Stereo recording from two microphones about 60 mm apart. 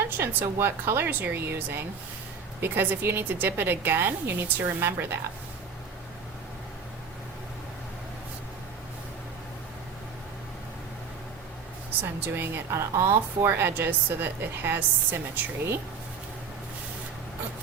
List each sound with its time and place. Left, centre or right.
0.0 s a woman's voice: right
12.0 s a woman's voice: right
12.7 s speech: right
13.5 s a woman's voice: right